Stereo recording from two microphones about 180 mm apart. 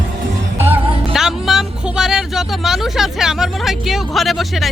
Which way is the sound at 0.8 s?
30° right (ahead or behind).